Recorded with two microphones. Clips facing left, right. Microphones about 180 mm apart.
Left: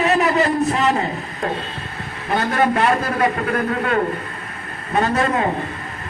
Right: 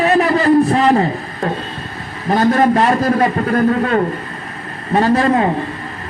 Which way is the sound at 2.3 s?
30° right (ahead or behind).